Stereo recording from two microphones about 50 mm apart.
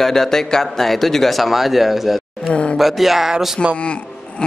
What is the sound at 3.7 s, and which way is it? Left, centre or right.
Speech, left.